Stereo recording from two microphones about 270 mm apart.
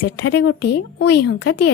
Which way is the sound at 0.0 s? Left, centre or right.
Left.